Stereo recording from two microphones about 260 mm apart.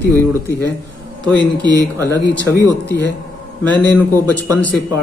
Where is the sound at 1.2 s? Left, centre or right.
Centre.